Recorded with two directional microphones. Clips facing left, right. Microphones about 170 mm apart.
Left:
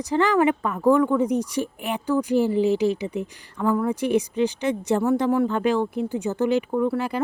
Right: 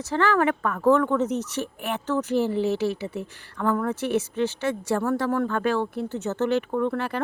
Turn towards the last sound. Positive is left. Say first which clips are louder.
# left 2 dB
turn(degrees=10)  # may be behind; listen again after turning